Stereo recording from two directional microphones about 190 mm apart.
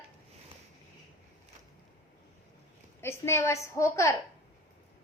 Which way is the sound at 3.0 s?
15° left (ahead or behind).